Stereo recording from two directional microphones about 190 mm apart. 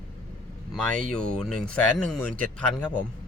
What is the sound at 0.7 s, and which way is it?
Speech, 5° left (ahead or behind).